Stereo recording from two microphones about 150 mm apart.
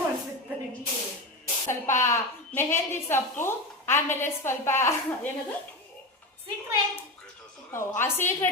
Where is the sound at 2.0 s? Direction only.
20° left (ahead or behind).